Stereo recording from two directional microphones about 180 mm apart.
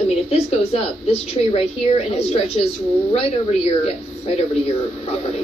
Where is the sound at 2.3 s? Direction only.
35° left (ahead or behind).